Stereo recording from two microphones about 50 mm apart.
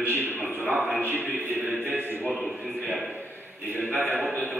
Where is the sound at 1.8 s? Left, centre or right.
Right.